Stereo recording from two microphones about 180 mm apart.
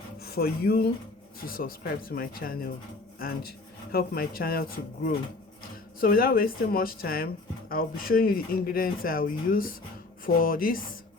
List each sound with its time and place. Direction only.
0.2 s speech: 60° left (ahead or behind)
6.0 s speech: 55° left (ahead or behind)